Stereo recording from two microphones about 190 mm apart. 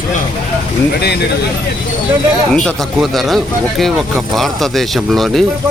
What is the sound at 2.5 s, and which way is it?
Speech, centre (ahead or behind).